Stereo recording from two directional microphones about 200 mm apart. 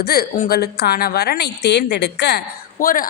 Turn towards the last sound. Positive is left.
turn(degrees=45)  # may be behind; listen again after turning